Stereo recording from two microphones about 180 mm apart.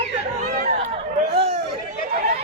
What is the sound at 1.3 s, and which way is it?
Chatter, 35° right (ahead or behind).